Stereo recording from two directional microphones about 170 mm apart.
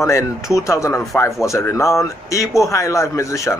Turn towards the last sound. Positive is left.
turn(degrees=15)  # may be behind; listen again after turning